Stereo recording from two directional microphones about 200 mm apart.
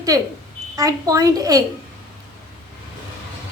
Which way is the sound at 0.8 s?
15° right (ahead or behind).